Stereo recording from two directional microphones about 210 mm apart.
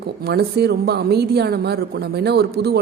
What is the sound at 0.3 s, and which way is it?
Speech, 50° right (ahead or behind).